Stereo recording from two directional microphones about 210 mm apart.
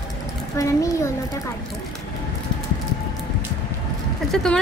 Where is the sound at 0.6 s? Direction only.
15° left (ahead or behind).